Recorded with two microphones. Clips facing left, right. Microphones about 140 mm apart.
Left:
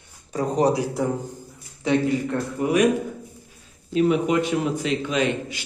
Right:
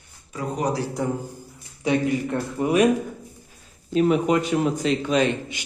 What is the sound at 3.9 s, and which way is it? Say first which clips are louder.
Speech: even; 40° right (ahead or behind).